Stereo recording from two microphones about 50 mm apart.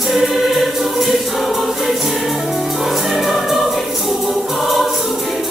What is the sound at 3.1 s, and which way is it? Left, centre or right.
Music, centre.